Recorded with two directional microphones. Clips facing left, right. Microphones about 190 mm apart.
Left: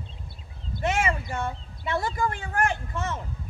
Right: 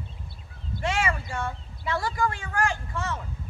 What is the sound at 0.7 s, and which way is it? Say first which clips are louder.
Speech: left 2 dB; 20° left (ahead or behind).